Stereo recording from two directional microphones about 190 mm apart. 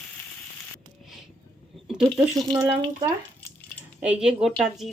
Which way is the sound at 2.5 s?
25° right (ahead or behind).